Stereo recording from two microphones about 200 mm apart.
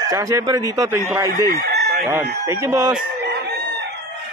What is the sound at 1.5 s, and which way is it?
Chicken, 50° right (ahead or behind).